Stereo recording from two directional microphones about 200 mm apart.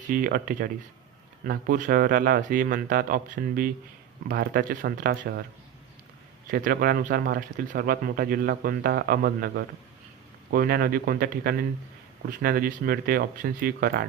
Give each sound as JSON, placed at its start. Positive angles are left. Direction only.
{"t": 0.1, "sound": "speech", "side_deg": -45}
{"t": 6.5, "sound": "speech", "side_deg": -45}